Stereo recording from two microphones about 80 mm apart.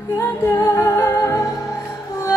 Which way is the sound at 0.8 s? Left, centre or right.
Left.